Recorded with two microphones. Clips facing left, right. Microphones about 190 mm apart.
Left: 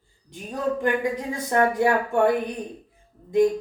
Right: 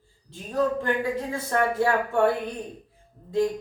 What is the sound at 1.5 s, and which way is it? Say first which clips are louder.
Speech: left 3 dB; 15° left (ahead or behind).